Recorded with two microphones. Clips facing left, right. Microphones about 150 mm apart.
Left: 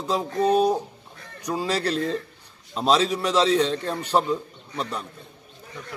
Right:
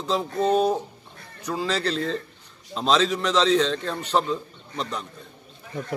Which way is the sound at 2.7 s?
10° left (ahead or behind).